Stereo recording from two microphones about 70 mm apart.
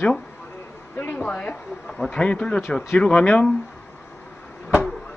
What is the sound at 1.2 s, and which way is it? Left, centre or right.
A man's voice, centre.